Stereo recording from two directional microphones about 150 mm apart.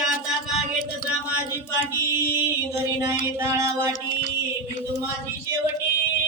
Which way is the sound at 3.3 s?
20° right (ahead or behind).